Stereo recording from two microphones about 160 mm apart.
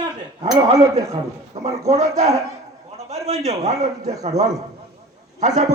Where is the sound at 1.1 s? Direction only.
45° right (ahead or behind).